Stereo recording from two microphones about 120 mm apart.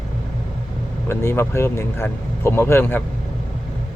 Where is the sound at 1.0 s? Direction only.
20° left (ahead or behind).